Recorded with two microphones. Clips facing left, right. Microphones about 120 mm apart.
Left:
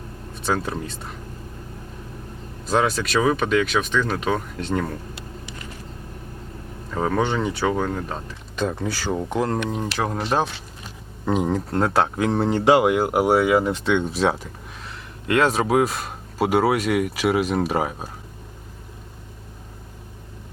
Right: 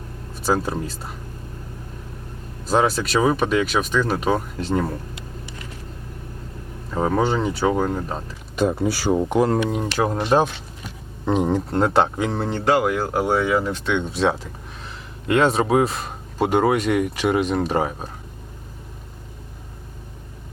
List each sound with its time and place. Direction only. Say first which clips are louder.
0.4 s speech: right 3 dB; 5° right (ahead or behind)
2.6 s speech: right 2 dB; centre (ahead or behind)
6.9 s speech: right 2 dB; 15° right (ahead or behind)
7.2 s speech: right 2 dB; centre (ahead or behind)
11.3 s speech: right 2 dB; centre (ahead or behind)
15.3 s speech: right 1 dB; centre (ahead or behind)